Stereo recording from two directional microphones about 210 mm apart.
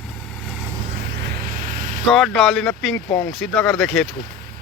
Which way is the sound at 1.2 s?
40° right (ahead or behind).